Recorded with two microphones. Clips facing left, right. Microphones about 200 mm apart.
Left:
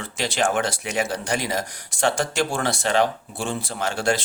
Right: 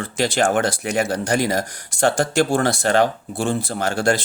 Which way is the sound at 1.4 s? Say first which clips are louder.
Right 6 dB; 55° right (ahead or behind).